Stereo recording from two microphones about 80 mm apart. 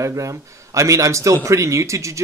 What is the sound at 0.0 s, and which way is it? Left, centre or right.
Speech, right.